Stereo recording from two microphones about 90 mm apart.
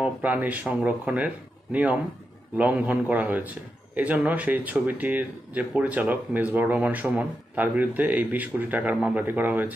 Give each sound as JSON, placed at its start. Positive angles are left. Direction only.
{"t": 0.0, "sound": "a man's voice", "side_deg": -15}